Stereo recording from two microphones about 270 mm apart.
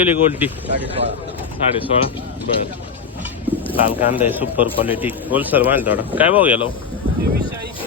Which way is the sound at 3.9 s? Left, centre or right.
Centre.